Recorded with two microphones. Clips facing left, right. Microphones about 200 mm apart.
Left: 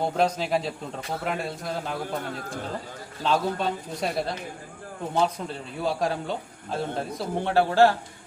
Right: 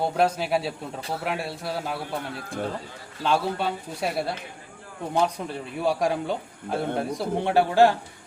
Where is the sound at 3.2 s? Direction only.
5° right (ahead or behind).